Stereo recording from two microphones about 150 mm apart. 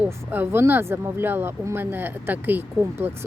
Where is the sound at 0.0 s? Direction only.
15° right (ahead or behind).